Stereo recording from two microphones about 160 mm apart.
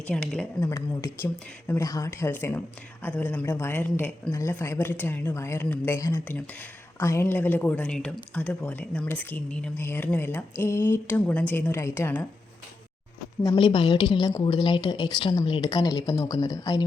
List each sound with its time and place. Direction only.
0.1 s speech: 5° left (ahead or behind)
0.7 s speech: 15° left (ahead or behind)
13.4 s a woman's voice: 25° left (ahead or behind)